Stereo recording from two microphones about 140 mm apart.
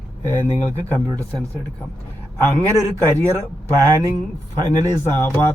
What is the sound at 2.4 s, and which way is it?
Speech, 15° left (ahead or behind).